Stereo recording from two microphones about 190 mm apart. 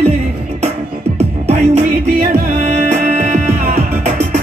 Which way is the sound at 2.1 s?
45° right (ahead or behind).